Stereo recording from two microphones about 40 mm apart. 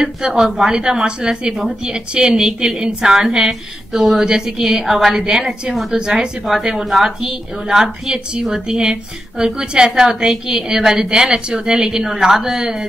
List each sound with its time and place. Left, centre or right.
0.0 s a woman's voice: centre